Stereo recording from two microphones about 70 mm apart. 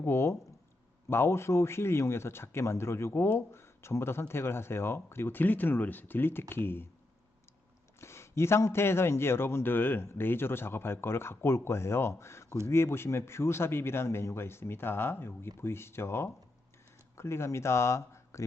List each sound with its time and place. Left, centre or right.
0.0 s speech: left
8.0 s speech: left